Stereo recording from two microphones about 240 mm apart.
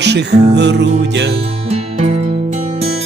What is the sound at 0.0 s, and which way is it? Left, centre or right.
Music, right.